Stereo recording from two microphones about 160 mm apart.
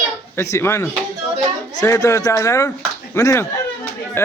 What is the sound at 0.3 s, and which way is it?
Speech, 15° left (ahead or behind).